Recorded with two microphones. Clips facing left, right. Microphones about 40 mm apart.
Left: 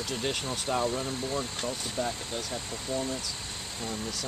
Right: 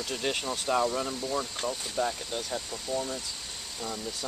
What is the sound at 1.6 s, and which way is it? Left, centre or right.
Speech, centre.